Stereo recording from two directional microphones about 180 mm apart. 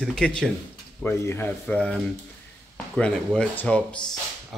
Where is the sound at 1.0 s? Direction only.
15° left (ahead or behind).